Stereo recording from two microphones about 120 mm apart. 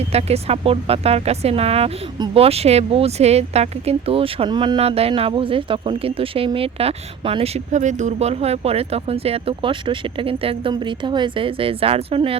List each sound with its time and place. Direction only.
0.1 s speech: 60° right (ahead or behind); by 4.8 s 40° right (ahead or behind)
4.8 s speech: 55° right (ahead or behind)
7.7 s speech: 85° right; by 12.4 s 50° right (ahead or behind)